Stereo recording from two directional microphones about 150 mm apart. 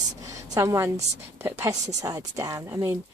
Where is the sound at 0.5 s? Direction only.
20° right (ahead or behind).